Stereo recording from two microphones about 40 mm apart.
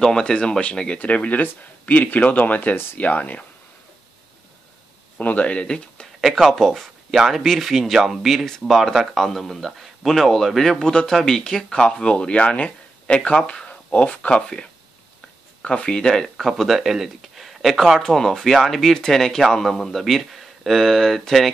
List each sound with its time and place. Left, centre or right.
0.0 s speech: centre
0.9 s speech: left
1.4 s speech: left
5.2 s speech: left
6.5 s speech: centre
7.1 s speech: centre
10.8 s speech: centre
16.3 s speech: centre
17.4 s a sound: centre
18.0 s speech: centre